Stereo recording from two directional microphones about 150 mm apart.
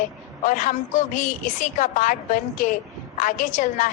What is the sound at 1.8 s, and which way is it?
A woman's voice, 60° left (ahead or behind).